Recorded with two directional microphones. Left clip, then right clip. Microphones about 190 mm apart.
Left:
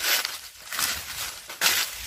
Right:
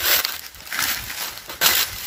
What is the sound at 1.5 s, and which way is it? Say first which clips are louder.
Crushing: right 4 dB; 60° right (ahead or behind).